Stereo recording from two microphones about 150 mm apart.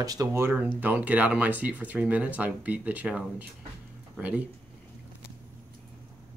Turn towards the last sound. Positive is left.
turn(degrees=-10)  # may be behind; listen again after turning